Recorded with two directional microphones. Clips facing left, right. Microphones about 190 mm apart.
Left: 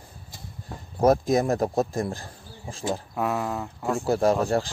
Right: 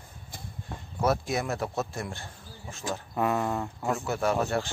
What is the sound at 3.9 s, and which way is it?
Speech, 35° left (ahead or behind).